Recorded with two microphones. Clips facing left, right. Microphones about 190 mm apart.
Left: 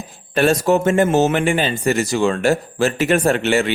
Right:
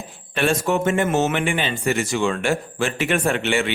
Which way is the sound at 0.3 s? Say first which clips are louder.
Left 5 dB; 40° left (ahead or behind).